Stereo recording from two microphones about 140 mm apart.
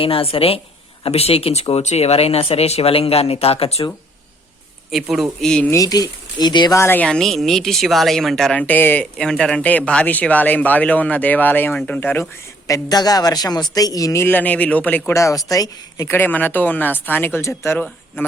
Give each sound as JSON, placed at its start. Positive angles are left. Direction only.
{"t": 0.0, "sound": "speech", "side_deg": 40}
{"t": 4.9, "sound": "speech", "side_deg": 0}
{"t": 5.7, "sound": "speech", "side_deg": 25}
{"t": 6.7, "sound": "speech", "side_deg": 15}
{"t": 12.6, "sound": "speech", "side_deg": 25}